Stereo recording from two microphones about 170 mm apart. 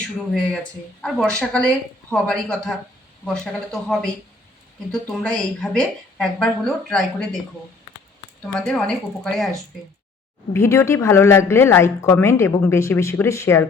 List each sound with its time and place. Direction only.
1.0 s a woman's voice: 5° left (ahead or behind)
8.5 s a woman's voice: 5° left (ahead or behind)
10.5 s a woman's voice: 15° left (ahead or behind)